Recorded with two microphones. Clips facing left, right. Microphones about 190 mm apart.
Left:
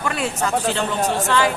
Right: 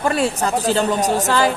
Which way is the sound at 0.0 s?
35° right (ahead or behind).